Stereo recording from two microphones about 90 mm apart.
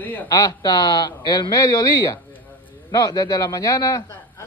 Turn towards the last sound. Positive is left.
turn(degrees=40)  # may be behind; listen again after turning